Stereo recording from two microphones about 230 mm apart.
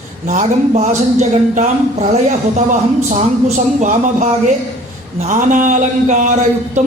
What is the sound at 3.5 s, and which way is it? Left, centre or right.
Speech, right.